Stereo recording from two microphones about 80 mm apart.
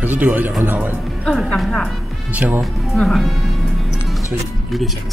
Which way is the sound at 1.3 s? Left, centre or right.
Centre.